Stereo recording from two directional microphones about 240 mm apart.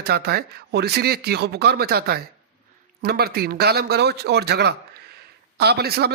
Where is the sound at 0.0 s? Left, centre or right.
Right.